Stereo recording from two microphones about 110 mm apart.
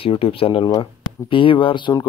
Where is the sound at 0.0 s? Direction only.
55° left (ahead or behind).